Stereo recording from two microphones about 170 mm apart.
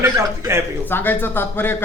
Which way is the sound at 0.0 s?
15° right (ahead or behind).